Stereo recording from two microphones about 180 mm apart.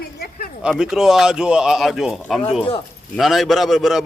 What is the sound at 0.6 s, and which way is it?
Speech, 5° right (ahead or behind).